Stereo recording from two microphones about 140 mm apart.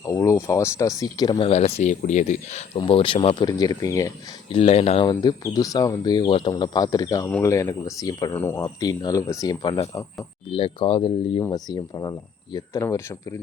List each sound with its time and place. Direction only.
0.0 s speech: 25° left (ahead or behind)
1.4 s speech: 45° left (ahead or behind)
2.7 s speech: 35° left (ahead or behind)
4.5 s speech: 45° left (ahead or behind)
5.0 s speech: 25° left (ahead or behind)
11.4 s speech: 25° left (ahead or behind)